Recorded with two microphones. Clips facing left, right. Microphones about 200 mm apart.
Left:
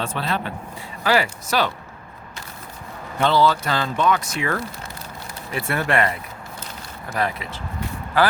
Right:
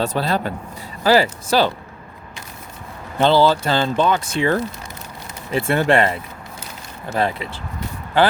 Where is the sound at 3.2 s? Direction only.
30° right (ahead or behind).